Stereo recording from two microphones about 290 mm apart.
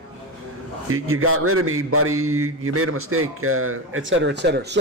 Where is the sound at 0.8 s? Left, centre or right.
Right.